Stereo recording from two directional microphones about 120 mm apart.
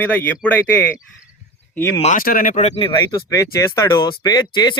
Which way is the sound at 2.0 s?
70° left (ahead or behind).